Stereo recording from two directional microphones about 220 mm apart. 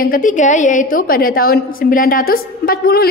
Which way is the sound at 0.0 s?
40° left (ahead or behind).